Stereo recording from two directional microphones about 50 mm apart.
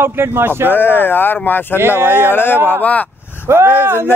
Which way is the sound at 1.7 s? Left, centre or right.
Right.